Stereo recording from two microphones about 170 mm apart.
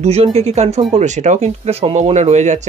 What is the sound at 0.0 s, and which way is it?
Speech, 40° right (ahead or behind).